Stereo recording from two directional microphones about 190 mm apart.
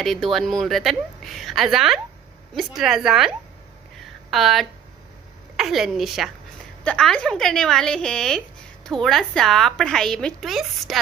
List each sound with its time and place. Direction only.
0.0 s a woman's voice: centre (ahead or behind)